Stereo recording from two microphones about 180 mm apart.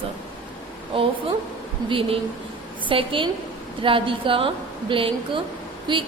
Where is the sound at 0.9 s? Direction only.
30° right (ahead or behind).